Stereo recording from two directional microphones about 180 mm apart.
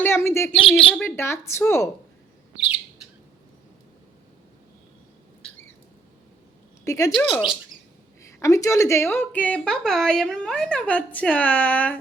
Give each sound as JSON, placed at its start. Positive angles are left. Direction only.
{"t": 0.0, "sound": "a woman's voice", "side_deg": 15}
{"t": 6.8, "sound": "a woman's voice", "side_deg": 15}